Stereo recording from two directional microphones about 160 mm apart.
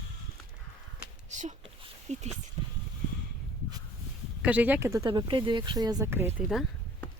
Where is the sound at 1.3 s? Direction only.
50° right (ahead or behind).